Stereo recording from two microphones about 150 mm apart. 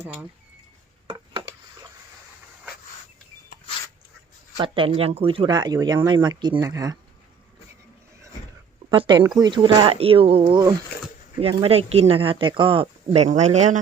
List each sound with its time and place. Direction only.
1.0 s a sound: 35° right (ahead or behind)
4.5 s speech: 35° right (ahead or behind)
8.9 s speech: 30° right (ahead or behind)
11.3 s speech: 40° right (ahead or behind)